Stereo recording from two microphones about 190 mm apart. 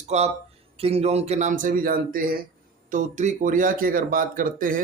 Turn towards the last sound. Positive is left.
turn(degrees=-45)  # may be behind; listen again after turning